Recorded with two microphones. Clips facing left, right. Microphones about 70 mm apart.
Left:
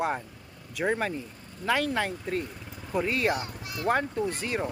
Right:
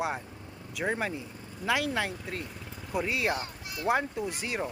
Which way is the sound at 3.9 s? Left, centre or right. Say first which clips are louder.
Left 2 dB; centre.